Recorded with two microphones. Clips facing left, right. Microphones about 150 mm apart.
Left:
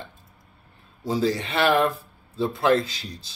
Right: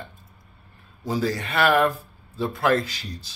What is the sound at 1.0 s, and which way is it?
A man's voice, 25° left (ahead or behind).